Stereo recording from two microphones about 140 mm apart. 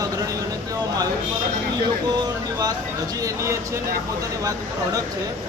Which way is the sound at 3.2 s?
20° right (ahead or behind).